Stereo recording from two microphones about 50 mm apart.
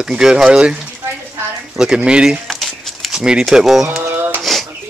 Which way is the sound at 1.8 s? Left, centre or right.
Centre.